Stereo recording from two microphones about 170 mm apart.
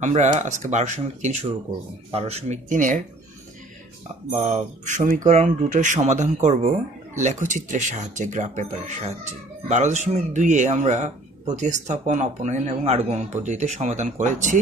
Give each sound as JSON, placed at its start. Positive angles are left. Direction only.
{"t": 0.0, "sound": "speech", "side_deg": -45}
{"t": 4.5, "sound": "speech", "side_deg": -45}